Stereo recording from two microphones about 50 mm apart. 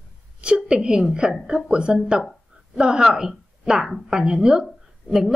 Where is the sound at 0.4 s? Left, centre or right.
Centre.